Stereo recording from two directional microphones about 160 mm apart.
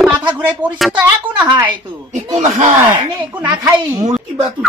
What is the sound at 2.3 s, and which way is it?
Speech, 45° right (ahead or behind).